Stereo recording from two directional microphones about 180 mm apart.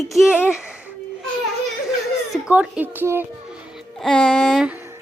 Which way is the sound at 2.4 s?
5° right (ahead or behind).